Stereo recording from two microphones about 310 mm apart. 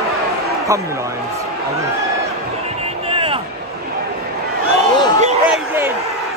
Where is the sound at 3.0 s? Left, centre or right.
Centre.